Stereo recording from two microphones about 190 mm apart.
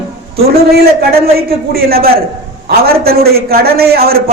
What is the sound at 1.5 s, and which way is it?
A man's voice, 55° right (ahead or behind).